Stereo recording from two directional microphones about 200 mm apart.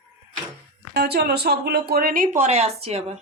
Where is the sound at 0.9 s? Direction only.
55° right (ahead or behind); by 3.2 s 30° right (ahead or behind).